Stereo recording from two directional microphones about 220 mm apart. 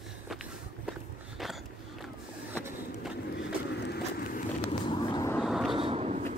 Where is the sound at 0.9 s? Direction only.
Centre (ahead or behind).